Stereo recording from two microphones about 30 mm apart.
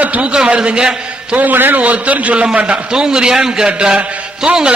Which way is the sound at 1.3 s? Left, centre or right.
Right.